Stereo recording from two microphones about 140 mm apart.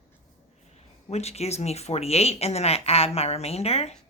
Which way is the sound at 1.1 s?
50° left (ahead or behind).